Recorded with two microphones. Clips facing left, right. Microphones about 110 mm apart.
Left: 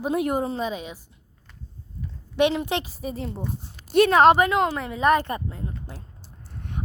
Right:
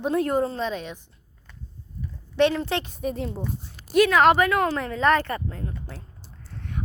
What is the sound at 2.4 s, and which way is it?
Speech, 15° left (ahead or behind).